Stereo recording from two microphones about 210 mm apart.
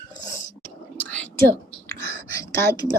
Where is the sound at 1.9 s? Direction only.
15° left (ahead or behind).